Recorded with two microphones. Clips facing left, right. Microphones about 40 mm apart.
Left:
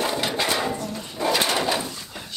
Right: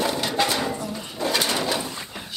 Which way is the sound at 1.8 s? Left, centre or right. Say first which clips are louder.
Right 2 dB; centre.